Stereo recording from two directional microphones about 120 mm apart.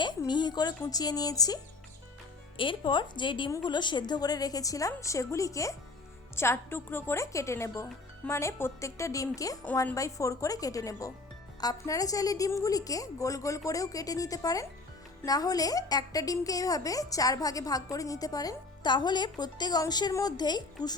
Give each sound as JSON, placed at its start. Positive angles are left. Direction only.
{"t": 0.3, "sound": "speech", "side_deg": 40}
{"t": 2.6, "sound": "a woman's voice", "side_deg": 40}